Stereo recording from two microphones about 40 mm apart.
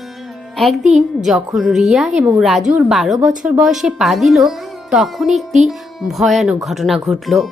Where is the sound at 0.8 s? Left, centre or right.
Centre.